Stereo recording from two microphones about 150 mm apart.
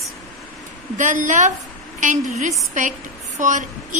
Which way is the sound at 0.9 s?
60° right (ahead or behind).